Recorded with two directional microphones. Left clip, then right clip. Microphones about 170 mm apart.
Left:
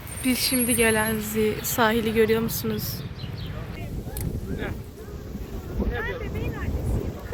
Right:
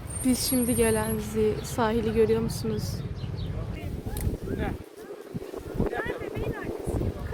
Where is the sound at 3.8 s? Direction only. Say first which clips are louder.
Left 1 dB; 65° right (ahead or behind).